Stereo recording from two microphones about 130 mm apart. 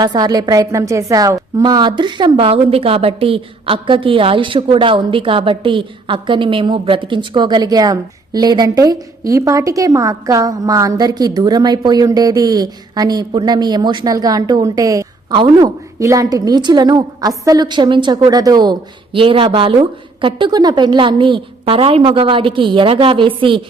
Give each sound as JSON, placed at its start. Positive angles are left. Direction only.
{"t": 0.0, "sound": "a woman's voice", "side_deg": -30}